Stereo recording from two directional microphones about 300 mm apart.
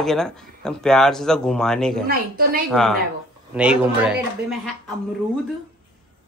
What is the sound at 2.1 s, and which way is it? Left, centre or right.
Speech, right.